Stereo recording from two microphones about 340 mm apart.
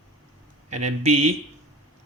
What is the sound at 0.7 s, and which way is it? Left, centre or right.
Speech, right.